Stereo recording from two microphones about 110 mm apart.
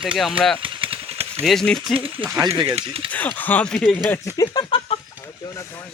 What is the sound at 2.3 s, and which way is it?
Speech, 25° right (ahead or behind).